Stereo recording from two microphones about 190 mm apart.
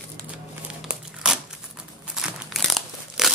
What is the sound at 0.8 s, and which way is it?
Crumpling, 5° right (ahead or behind).